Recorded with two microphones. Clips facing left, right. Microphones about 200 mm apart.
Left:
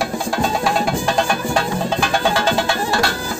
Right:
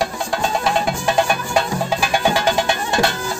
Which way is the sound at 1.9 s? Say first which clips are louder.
Right 1 dB; 10° right (ahead or behind).